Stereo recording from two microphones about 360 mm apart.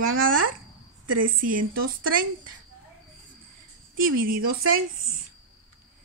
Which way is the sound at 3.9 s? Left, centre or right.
Right.